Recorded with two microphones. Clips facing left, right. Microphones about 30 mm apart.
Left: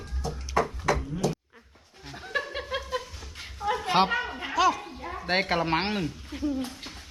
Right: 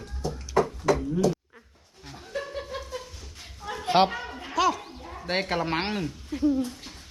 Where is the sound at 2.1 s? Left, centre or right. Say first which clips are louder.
Left 5 dB; left.